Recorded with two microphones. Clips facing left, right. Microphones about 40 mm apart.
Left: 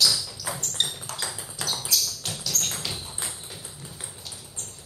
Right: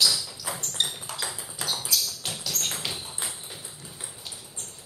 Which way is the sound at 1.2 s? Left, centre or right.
Centre.